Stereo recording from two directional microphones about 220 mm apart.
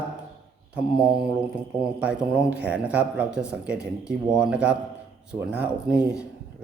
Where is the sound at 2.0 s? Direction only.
5° right (ahead or behind).